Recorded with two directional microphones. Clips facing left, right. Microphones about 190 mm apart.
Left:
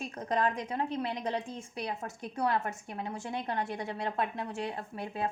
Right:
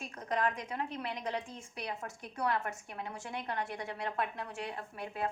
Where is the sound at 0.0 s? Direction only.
30° left (ahead or behind).